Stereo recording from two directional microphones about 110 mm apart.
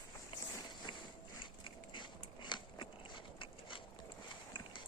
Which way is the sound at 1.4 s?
50° left (ahead or behind).